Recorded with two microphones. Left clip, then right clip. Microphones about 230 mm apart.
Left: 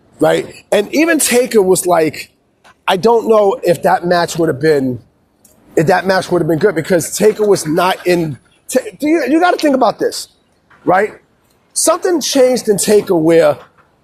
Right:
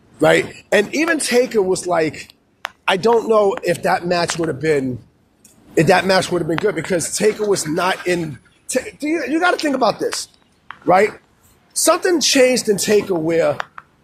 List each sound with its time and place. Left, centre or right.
0.2 s a woman's voice: left; by 12.7 s centre
12.7 s speech: left